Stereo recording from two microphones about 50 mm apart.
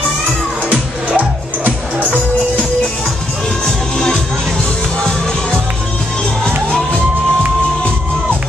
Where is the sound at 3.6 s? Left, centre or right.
Centre.